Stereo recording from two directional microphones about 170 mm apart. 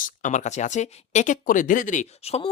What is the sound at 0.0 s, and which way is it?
Speech, 50° left (ahead or behind).